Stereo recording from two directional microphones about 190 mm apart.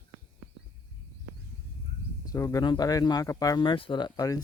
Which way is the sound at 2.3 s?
15° left (ahead or behind).